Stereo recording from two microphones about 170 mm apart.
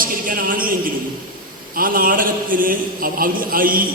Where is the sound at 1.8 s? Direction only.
55° right (ahead or behind).